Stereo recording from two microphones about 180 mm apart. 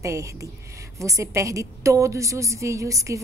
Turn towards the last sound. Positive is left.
turn(degrees=-15)  # may be behind; listen again after turning